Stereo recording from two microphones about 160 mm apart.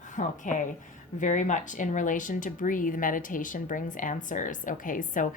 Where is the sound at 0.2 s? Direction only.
50° left (ahead or behind).